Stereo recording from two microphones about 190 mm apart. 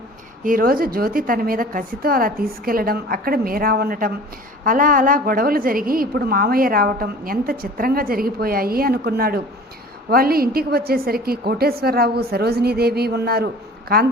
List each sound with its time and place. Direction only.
0.4 s a woman's voice: 50° right (ahead or behind)